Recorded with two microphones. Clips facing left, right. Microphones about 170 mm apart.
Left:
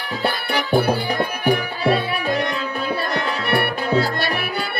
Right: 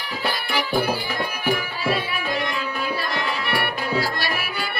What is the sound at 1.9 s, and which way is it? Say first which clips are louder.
Music: left 5 dB; 40° left (ahead or behind).